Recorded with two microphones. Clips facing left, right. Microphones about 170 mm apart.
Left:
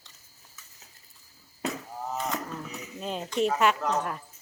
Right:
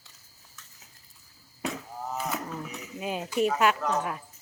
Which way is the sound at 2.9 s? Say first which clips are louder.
Right 1 dB; 10° right (ahead or behind).